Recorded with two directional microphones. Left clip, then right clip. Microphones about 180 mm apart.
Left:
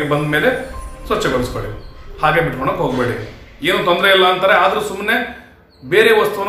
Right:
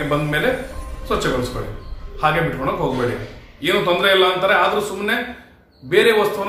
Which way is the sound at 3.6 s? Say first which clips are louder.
Left 3 dB; 15° left (ahead or behind).